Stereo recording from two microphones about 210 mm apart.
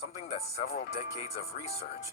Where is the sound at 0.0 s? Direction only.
30° left (ahead or behind).